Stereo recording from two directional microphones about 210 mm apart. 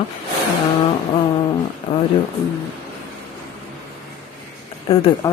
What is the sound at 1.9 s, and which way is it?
Speech, 25° left (ahead or behind).